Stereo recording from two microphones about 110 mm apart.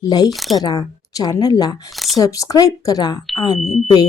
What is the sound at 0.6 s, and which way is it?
Speech, 35° left (ahead or behind).